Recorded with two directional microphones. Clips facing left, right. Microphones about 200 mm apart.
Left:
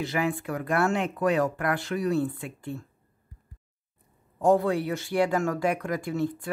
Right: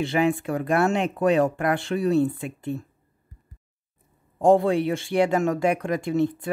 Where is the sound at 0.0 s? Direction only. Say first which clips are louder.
Right 6 dB; 25° right (ahead or behind).